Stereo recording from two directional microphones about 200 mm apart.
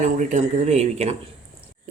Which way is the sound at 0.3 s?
35° right (ahead or behind).